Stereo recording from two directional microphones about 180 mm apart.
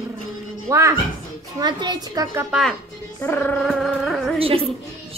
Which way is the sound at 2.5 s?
Centre (ahead or behind).